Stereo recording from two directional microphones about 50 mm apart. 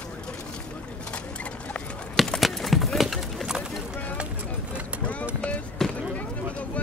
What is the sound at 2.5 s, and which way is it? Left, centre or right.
Horse, centre.